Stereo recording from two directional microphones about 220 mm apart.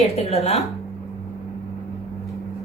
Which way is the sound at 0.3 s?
30° left (ahead or behind).